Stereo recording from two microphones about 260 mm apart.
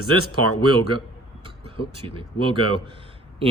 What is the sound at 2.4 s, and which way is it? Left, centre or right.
Speech, centre.